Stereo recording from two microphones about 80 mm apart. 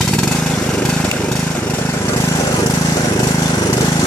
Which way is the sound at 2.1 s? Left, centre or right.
Left.